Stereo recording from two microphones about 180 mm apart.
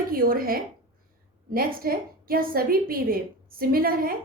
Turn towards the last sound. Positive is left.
turn(degrees=-55)  # may be behind; listen again after turning